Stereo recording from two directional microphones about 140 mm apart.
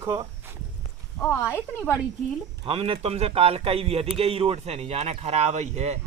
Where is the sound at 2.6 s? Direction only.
40° right (ahead or behind).